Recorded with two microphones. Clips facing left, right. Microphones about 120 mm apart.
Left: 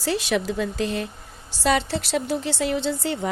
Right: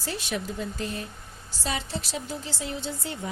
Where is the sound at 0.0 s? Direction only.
90° left.